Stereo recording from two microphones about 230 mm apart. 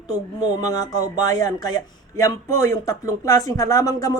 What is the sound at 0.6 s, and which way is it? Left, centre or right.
Speech, centre.